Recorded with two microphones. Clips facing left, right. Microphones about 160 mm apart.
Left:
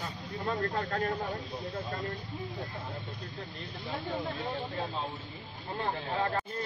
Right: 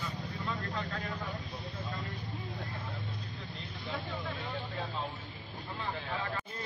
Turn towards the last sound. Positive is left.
turn(degrees=45)  # may be behind; listen again after turning